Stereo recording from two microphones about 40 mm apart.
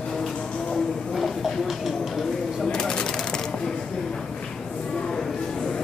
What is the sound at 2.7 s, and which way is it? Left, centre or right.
Bird, left.